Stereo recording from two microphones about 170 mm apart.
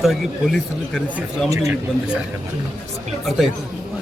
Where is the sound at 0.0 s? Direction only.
Centre (ahead or behind).